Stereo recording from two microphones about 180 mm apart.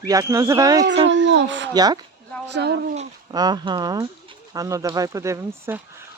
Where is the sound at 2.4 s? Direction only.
70° right (ahead or behind).